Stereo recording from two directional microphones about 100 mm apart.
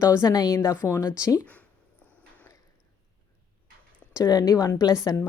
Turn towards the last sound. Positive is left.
turn(degrees=35)  # may be behind; listen again after turning